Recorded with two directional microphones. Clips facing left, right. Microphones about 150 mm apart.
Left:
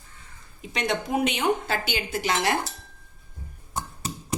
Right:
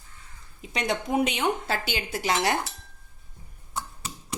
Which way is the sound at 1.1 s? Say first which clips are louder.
Left 1 dB; 35° right (ahead or behind).